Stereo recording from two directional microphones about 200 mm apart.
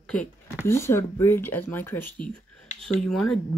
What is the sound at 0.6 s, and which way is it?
Speech, 10° left (ahead or behind).